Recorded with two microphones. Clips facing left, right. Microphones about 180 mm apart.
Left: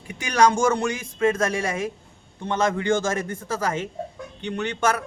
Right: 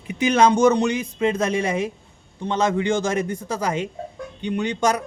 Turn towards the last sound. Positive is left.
turn(degrees=-15)  # may be behind; listen again after turning